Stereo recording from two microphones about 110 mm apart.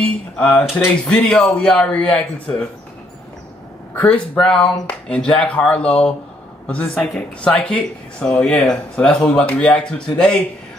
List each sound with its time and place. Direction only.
0.4 s speech: 5° left (ahead or behind)
3.9 s speech: 15° left (ahead or behind)